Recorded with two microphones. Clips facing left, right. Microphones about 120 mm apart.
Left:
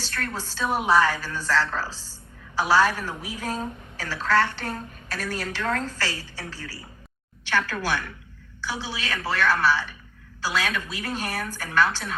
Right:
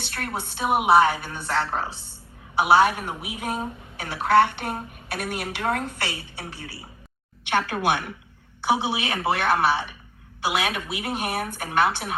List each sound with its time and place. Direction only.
0.0 s a sound: 20° right (ahead or behind)
0.3 s a woman's voice: 15° right (ahead or behind)
8.6 s a woman's voice: 15° right (ahead or behind)